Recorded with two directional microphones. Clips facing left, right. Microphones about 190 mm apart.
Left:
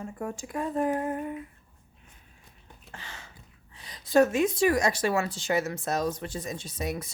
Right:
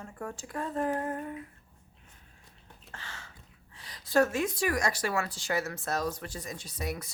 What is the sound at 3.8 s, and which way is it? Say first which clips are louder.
Speech: left 4 dB; 20° left (ahead or behind).